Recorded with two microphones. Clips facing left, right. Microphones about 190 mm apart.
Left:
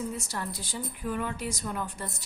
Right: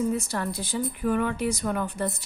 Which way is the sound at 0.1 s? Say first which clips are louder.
Right 7 dB; 60° right (ahead or behind).